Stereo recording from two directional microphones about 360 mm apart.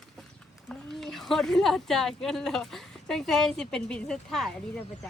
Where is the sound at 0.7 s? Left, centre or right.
Centre.